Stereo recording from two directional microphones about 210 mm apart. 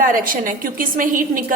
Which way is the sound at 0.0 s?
40° right (ahead or behind).